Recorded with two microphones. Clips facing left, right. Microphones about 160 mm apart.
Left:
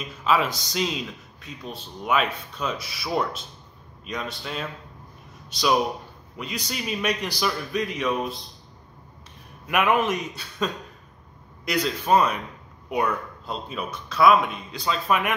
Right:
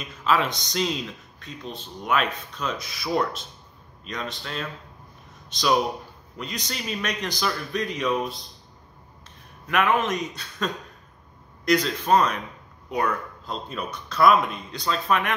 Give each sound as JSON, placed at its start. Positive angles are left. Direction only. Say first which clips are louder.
{"t": 0.2, "sound": "a man's voice", "louder": "even", "side_deg": 5}
{"t": 6.3, "sound": "a man's voice", "louder": "left 1 dB", "side_deg": 5}
{"t": 9.7, "sound": "a man's voice", "louder": "left 1 dB", "side_deg": 10}